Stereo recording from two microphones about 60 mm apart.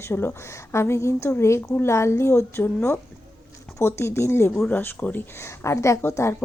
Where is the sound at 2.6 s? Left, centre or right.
Left.